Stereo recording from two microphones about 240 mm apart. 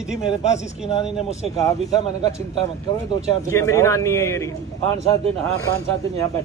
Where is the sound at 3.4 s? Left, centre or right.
Centre.